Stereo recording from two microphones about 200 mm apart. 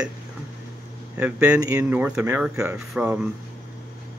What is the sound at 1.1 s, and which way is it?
Speech, 5° right (ahead or behind).